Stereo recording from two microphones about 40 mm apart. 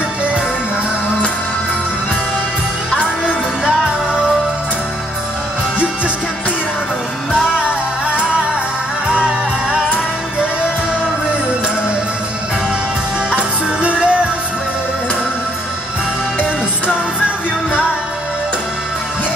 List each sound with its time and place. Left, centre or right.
7.6 s music: right
13.3 s music: right